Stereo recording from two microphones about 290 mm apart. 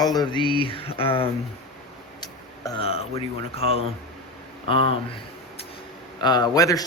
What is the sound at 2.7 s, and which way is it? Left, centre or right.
Speech, centre.